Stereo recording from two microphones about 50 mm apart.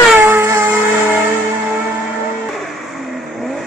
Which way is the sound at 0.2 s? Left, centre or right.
Right.